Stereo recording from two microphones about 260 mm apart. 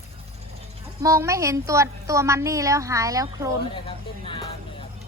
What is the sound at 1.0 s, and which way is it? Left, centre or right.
A woman's voice, centre.